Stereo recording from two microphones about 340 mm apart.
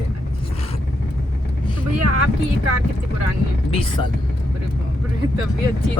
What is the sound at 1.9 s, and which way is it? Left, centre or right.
Speech, right.